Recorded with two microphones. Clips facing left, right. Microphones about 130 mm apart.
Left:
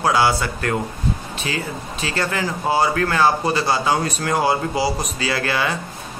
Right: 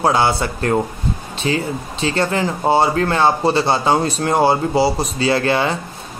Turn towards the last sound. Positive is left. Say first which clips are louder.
# right 5 dB
turn(degrees=-25)  # may be behind; listen again after turning